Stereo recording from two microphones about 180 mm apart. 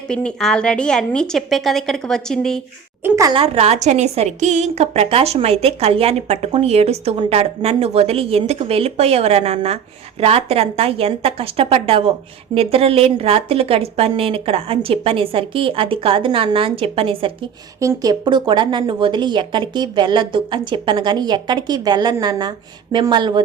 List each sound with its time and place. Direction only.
0.1 s a woman's voice: 5° left (ahead or behind)
3.0 s a woman's voice: 15° right (ahead or behind)
3.3 s a woman's voice: 35° right (ahead or behind)
17.7 s a woman's voice: 20° right (ahead or behind)